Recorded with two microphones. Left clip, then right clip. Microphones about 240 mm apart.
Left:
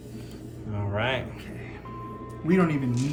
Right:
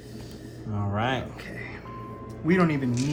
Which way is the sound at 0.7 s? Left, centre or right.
Centre.